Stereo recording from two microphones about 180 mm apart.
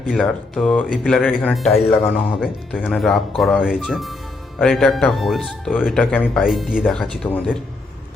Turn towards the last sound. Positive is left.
turn(degrees=5)  # may be behind; listen again after turning